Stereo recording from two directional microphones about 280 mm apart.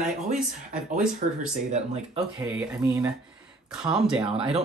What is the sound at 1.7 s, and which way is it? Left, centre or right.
Speech, right.